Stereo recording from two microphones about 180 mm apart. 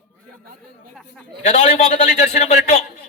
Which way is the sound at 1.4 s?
40° left (ahead or behind).